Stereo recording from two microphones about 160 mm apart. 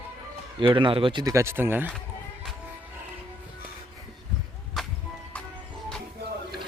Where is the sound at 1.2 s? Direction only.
20° right (ahead or behind).